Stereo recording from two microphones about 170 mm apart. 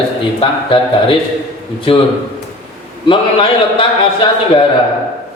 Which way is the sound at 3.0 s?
30° left (ahead or behind).